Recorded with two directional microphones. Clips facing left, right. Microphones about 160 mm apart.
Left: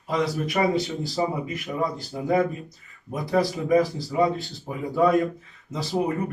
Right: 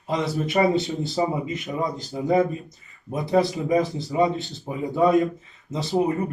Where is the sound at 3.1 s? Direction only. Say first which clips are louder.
Right 2 dB; 25° right (ahead or behind).